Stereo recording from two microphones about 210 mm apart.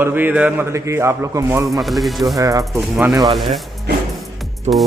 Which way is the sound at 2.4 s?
15° right (ahead or behind).